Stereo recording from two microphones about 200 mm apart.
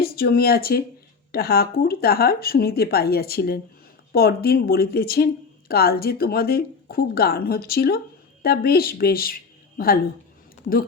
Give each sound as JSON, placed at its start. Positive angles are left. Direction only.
{"t": 0.0, "sound": "a woman's voice", "side_deg": 50}